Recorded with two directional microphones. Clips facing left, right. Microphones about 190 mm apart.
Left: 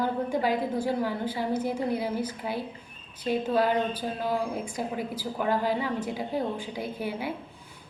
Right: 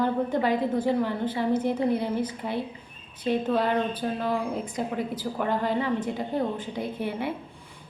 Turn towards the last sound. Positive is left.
turn(degrees=5)  # may be behind; listen again after turning